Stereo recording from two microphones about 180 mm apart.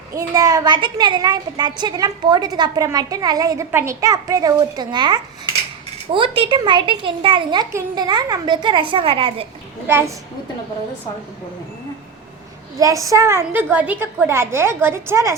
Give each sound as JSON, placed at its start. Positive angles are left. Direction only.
{"t": 0.1, "sound": "a child's voice", "side_deg": -20}
{"t": 9.8, "sound": "a woman's voice", "side_deg": -10}
{"t": 12.8, "sound": "a woman's voice", "side_deg": -20}